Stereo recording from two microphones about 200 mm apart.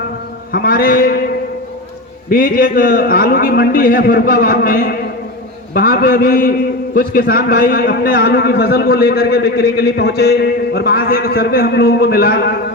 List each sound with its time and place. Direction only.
0.5 s a man's voice: 45° left (ahead or behind)
2.3 s a man's voice: 45° left (ahead or behind)